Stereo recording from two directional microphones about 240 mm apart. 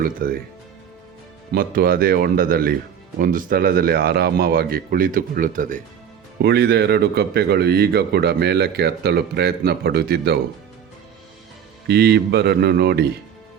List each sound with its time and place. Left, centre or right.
0.0 s speech: right
1.5 s speech: right
11.9 s speech: right